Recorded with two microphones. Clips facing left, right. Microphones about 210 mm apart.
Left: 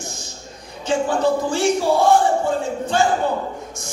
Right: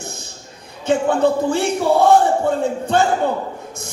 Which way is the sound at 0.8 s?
60° right (ahead or behind).